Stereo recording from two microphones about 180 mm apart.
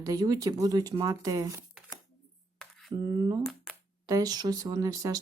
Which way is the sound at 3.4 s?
Centre (ahead or behind).